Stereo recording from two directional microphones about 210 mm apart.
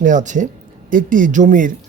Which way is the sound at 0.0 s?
35° right (ahead or behind).